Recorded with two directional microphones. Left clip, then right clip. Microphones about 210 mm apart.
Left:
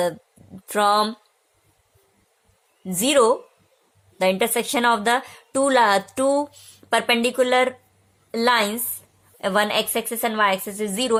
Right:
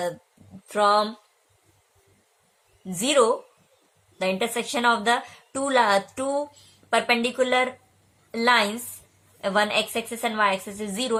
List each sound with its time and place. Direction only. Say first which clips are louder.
0.7 s a woman's voice: left 2 dB; 50° left (ahead or behind)
2.8 s a woman's voice: left 3 dB; 45° left (ahead or behind)